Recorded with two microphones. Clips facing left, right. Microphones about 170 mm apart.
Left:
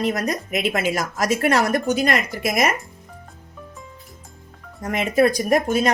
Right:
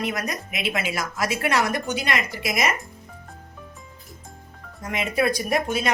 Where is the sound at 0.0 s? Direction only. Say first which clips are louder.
Left 5 dB; 40° left (ahead or behind).